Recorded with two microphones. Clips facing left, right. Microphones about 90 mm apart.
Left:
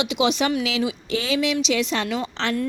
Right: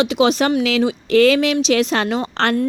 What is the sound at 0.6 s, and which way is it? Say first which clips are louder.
A woman's voice: right 7 dB; 50° right (ahead or behind).